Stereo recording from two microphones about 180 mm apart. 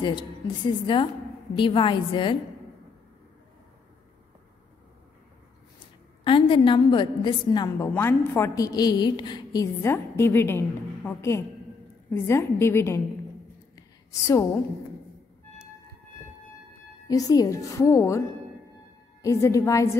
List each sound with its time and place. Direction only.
0.0 s a woman's voice: 25° left (ahead or behind)
6.2 s a woman's voice: 30° left (ahead or behind)
13.7 s a sound: 15° left (ahead or behind)
17.1 s a woman's voice: 20° left (ahead or behind)
19.2 s a woman's voice: 15° left (ahead or behind)